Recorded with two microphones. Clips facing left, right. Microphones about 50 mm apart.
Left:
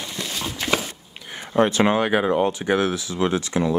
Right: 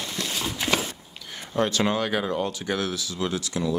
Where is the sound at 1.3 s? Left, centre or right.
Left.